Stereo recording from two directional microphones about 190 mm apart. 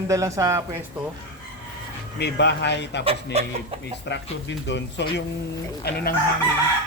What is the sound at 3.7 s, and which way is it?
Speech, 30° right (ahead or behind).